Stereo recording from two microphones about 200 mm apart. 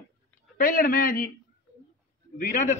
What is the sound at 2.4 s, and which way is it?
Speech, 40° left (ahead or behind).